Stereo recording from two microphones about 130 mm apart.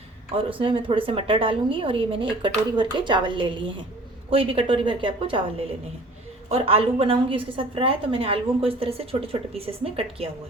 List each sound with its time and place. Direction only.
0.6 s a woman's voice: 40° right (ahead or behind)